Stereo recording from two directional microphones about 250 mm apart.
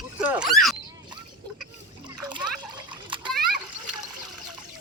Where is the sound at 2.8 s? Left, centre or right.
Centre.